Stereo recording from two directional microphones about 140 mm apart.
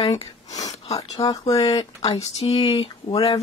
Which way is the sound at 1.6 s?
40° left (ahead or behind).